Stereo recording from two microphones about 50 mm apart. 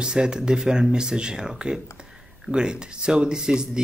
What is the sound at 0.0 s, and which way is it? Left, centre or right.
Speech, centre.